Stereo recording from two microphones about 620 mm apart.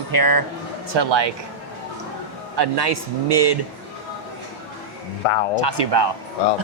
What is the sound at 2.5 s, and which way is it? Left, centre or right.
Speech, right.